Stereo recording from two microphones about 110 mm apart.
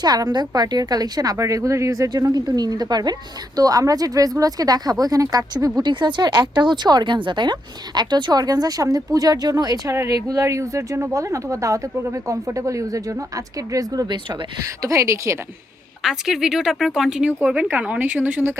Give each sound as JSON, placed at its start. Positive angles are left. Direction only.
{"t": 0.0, "sound": "a woman's voice", "side_deg": -35}
{"t": 16.0, "sound": "speech", "side_deg": -5}